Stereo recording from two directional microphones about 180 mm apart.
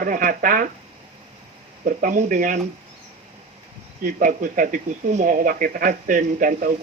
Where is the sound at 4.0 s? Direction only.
45° right (ahead or behind).